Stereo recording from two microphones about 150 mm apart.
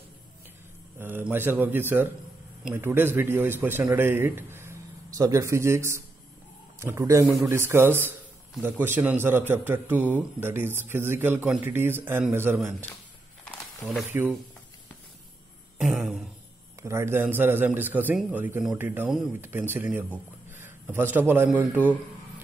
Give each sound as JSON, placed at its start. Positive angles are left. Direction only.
{"t": 0.9, "sound": "a man's voice", "side_deg": -15}
{"t": 14.1, "sound": "a man's voice", "side_deg": -15}
{"t": 15.8, "sound": "a sound", "side_deg": -5}
{"t": 16.8, "sound": "a man's voice", "side_deg": -15}
{"t": 19.0, "sound": "a sound", "side_deg": 0}
{"t": 19.7, "sound": "a man's voice", "side_deg": -10}